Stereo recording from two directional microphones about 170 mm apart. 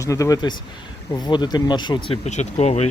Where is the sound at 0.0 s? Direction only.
20° left (ahead or behind).